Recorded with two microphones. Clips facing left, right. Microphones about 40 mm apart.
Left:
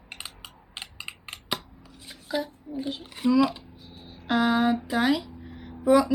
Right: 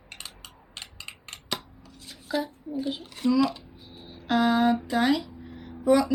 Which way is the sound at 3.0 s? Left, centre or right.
Centre.